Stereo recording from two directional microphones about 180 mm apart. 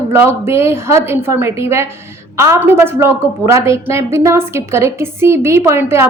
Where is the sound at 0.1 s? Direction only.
15° right (ahead or behind).